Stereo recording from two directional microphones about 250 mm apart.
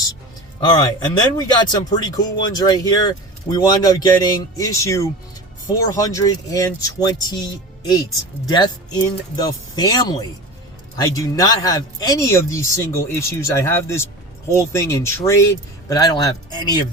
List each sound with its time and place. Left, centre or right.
0.6 s speech: centre
8.4 s speech: centre